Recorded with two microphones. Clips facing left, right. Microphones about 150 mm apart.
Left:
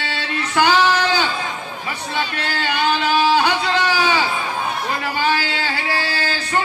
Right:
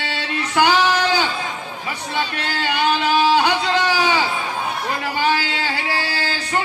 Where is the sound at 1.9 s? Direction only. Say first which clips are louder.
Even; 20° right (ahead or behind).